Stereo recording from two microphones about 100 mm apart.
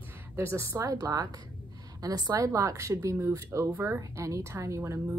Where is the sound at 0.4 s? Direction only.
30° right (ahead or behind).